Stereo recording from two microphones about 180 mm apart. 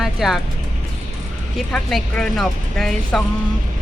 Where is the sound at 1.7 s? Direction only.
5° left (ahead or behind).